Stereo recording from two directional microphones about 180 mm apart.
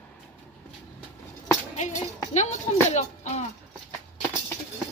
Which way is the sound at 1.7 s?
40° left (ahead or behind).